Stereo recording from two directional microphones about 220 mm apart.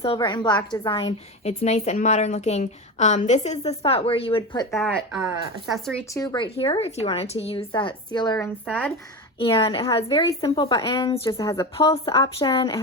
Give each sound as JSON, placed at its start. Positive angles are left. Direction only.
{"t": 0.0, "sound": "a woman's voice", "side_deg": 25}
{"t": 4.7, "sound": "speech", "side_deg": 0}
{"t": 6.1, "sound": "a woman's voice", "side_deg": 15}
{"t": 8.6, "sound": "speech", "side_deg": 0}
{"t": 9.4, "sound": "a woman's voice", "side_deg": 25}